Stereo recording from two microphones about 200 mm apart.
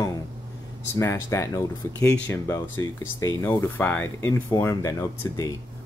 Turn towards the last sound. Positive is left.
turn(degrees=15)  # may be behind; listen again after turning